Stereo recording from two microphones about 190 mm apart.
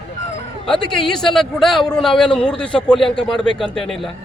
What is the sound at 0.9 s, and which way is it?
Speech, 5° left (ahead or behind).